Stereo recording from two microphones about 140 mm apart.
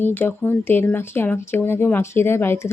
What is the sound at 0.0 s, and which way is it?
Speech, 15° left (ahead or behind).